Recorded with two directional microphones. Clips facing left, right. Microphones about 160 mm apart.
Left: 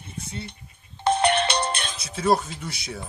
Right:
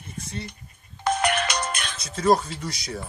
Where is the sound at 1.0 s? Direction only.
30° left (ahead or behind).